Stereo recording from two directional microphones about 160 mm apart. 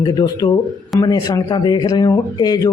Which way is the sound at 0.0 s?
25° left (ahead or behind).